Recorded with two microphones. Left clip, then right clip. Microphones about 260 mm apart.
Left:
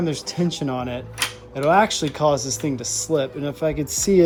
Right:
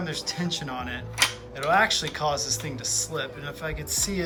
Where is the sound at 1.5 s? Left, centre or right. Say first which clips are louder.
Left 7 dB; centre.